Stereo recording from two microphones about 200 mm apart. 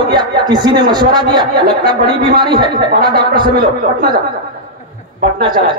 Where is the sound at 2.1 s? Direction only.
45° right (ahead or behind).